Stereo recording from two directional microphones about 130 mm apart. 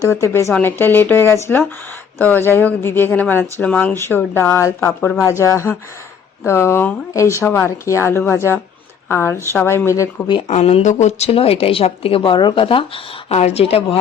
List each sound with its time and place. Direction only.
0.1 s speech: 20° left (ahead or behind)
10.5 s a woman's voice: 55° left (ahead or behind)
13.2 s a woman's voice: 55° left (ahead or behind)